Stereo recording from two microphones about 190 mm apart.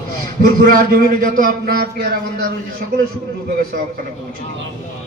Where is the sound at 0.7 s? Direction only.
50° right (ahead or behind).